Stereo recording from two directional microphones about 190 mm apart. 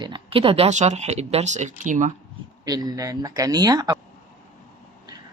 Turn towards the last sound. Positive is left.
turn(degrees=-20)  # may be behind; listen again after turning